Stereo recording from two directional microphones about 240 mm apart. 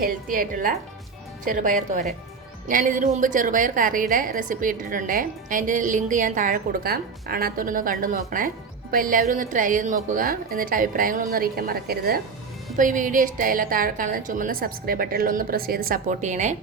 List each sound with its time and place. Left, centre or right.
0.0 s a woman's voice: right